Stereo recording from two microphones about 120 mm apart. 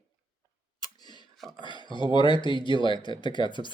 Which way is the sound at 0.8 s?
35° left (ahead or behind).